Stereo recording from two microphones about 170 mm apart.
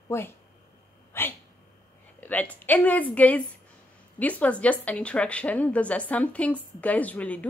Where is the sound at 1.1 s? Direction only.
15° left (ahead or behind).